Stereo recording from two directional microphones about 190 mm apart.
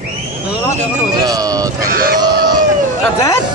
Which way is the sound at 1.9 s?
50° right (ahead or behind).